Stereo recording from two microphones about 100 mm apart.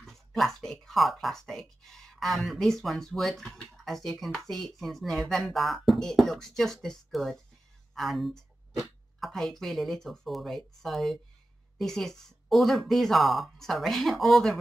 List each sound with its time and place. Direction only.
0.0 s speech: centre (ahead or behind)